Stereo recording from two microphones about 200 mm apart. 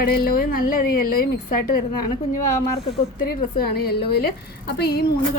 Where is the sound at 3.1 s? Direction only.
50° left (ahead or behind).